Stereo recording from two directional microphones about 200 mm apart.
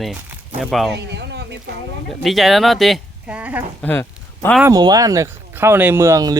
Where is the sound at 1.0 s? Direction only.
60° right (ahead or behind).